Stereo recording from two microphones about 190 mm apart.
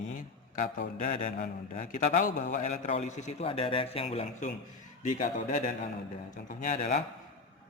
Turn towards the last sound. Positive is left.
turn(degrees=40)  # may be behind; listen again after turning